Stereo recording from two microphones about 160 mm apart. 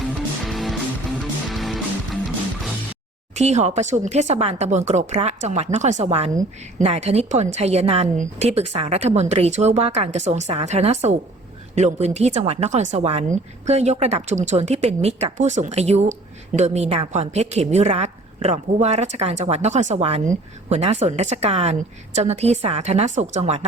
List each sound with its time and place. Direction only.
0.0 s music: centre (ahead or behind)
3.3 s a woman's voice: 45° right (ahead or behind)